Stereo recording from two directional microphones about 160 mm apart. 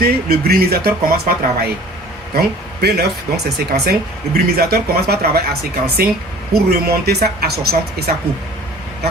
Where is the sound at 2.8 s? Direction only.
90° right.